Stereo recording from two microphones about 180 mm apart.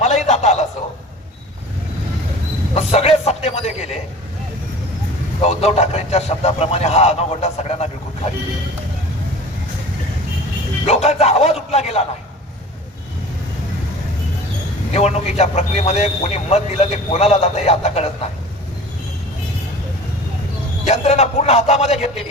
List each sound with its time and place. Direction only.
0.0 s a sound: 40° left (ahead or behind)
2.7 s a sound: 35° left (ahead or behind)
5.4 s a man's voice: 35° left (ahead or behind)
10.8 s music: 35° left (ahead or behind)
14.9 s a man's voice: 35° left (ahead or behind)
20.8 s a man's voice: 35° left (ahead or behind)